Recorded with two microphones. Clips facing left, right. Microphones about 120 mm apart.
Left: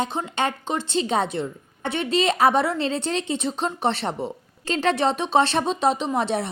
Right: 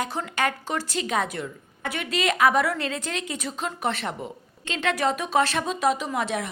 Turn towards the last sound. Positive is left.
turn(degrees=30)  # may be behind; listen again after turning